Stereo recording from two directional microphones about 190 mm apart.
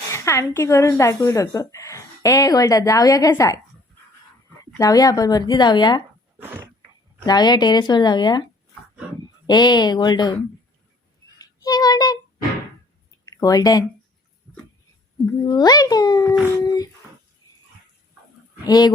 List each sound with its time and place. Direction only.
0.1 s speech: 15° left (ahead or behind)
4.8 s speech: 20° left (ahead or behind)
6.4 s dog: 10° right (ahead or behind)
7.3 s speech: 20° left (ahead or behind)
9.5 s speech: 20° left (ahead or behind)
11.3 s child singing: 20° left (ahead or behind)
13.1 s a sound: 20° left (ahead or behind)
15.4 s speech: 20° left (ahead or behind)
18.7 s speech: 20° left (ahead or behind)